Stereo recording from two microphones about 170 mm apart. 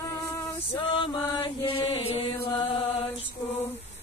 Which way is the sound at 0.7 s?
30° left (ahead or behind).